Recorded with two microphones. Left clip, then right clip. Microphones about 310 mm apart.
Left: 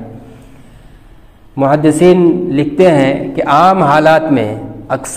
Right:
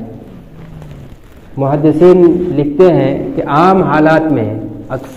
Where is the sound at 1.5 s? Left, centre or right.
Left.